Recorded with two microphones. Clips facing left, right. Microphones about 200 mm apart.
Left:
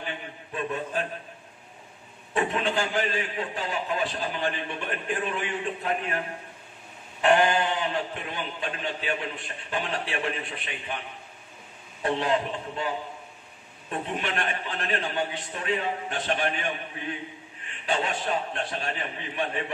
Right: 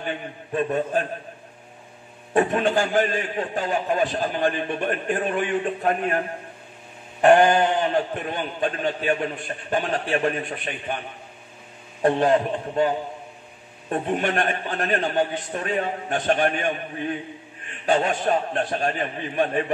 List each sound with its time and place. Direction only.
0.5 s a man's voice: 45° right (ahead or behind)
2.3 s a man's voice: 50° right (ahead or behind)
12.0 s a man's voice: 50° right (ahead or behind)
17.8 s a man's voice: 50° right (ahead or behind)